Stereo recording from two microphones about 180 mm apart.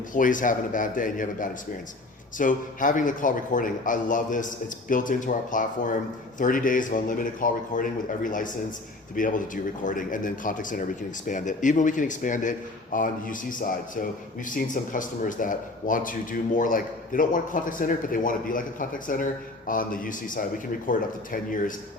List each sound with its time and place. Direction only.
0.1 s speech: 45° left (ahead or behind)